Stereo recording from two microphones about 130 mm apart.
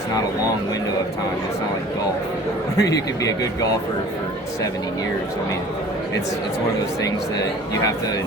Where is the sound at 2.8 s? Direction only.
25° left (ahead or behind).